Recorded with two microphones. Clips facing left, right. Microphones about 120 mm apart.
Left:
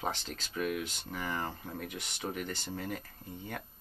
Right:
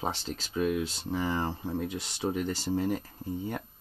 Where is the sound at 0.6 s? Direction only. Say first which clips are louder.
Right 6 dB; 25° right (ahead or behind).